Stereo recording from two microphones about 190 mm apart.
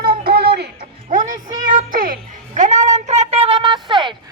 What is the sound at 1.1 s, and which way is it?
Music, 45° right (ahead or behind).